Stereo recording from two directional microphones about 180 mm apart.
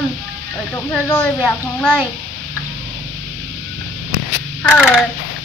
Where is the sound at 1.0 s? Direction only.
5° left (ahead or behind).